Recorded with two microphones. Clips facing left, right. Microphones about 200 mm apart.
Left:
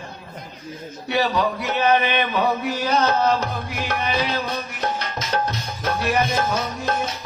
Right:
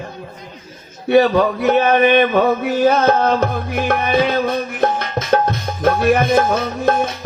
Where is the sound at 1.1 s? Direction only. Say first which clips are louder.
Right 9 dB; 55° right (ahead or behind).